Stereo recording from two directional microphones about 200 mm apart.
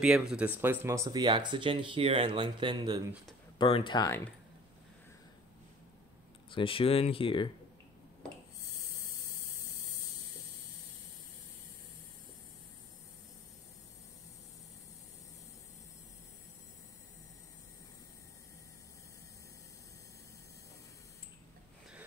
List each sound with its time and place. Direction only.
0.0 s speech: 5° right (ahead or behind); by 3.0 s 25° right (ahead or behind)
3.5 s speech: 25° left (ahead or behind)
6.5 s speech: 25° left (ahead or behind)